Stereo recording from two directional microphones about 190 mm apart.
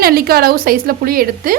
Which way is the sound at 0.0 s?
55° right (ahead or behind).